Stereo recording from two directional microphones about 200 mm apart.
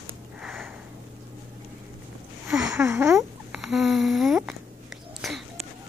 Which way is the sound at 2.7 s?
15° right (ahead or behind).